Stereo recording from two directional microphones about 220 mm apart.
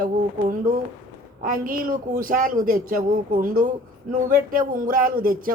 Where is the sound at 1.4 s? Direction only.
40° right (ahead or behind).